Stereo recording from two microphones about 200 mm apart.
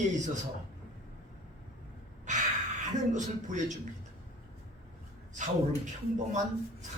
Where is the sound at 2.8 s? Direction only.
35° right (ahead or behind).